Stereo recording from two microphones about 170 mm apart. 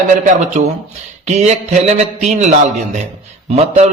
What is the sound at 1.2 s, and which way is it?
A man's voice, 40° right (ahead or behind).